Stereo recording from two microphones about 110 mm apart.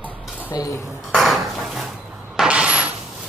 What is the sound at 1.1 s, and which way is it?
Dishes, centre (ahead or behind).